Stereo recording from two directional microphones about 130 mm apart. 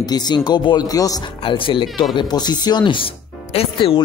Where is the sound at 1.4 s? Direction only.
40° left (ahead or behind).